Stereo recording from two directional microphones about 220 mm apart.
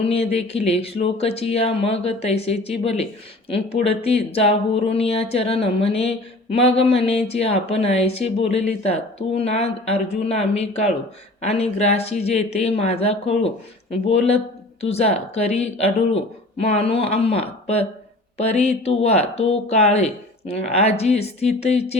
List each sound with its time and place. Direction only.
0.0 s speech: 25° left (ahead or behind)